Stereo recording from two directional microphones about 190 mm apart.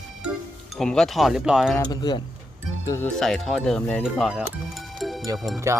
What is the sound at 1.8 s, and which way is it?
Speech, 20° left (ahead or behind).